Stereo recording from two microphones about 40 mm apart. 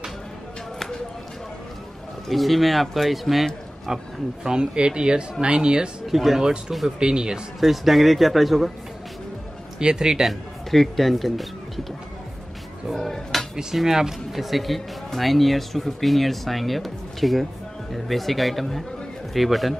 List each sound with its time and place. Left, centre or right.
0.7 s a sound: centre
2.2 s speech: centre; by 5.9 s right
6.0 s speech: centre
7.0 s speech: centre
7.6 s speech: centre
9.8 s speech: centre
10.2 s speech: centre
12.9 s speech: centre
13.7 s speech: centre